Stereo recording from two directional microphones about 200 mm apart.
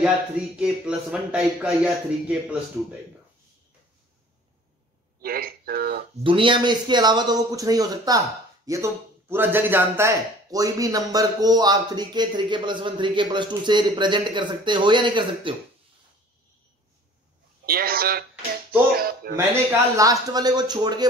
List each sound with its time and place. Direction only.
0.6 s a man's voice: 5° right (ahead or behind)
5.2 s speech: 50° right (ahead or behind)
6.2 s speech: 25° right (ahead or behind)
17.6 s speech: 50° right (ahead or behind)
19.3 s speech: 15° right (ahead or behind)